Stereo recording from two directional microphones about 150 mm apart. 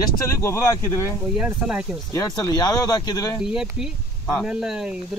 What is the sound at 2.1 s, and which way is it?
Speech, 25° left (ahead or behind).